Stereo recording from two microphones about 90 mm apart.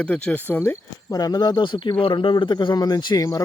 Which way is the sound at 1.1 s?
45° left (ahead or behind).